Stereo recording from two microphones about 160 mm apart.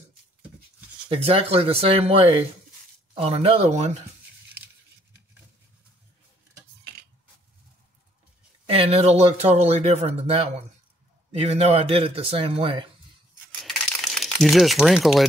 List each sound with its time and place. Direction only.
1.0 s speech: 35° right (ahead or behind)
8.6 s speech: 40° right (ahead or behind)
13.6 s crumpling: centre (ahead or behind)